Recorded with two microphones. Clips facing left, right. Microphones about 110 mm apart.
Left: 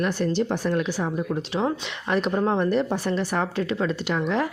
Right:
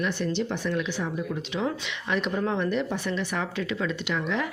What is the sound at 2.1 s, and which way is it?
A woman's voice, 40° left (ahead or behind).